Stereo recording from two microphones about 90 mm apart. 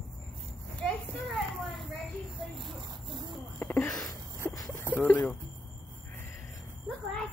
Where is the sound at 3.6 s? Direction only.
25° left (ahead or behind).